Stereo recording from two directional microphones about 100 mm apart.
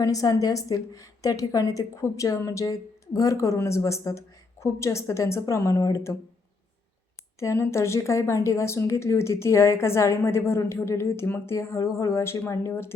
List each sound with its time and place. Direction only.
0.0 s a woman's voice: 35° left (ahead or behind)
7.3 s speech: 30° left (ahead or behind)